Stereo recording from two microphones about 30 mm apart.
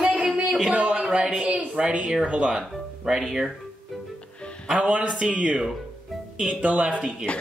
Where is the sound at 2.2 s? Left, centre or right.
Right.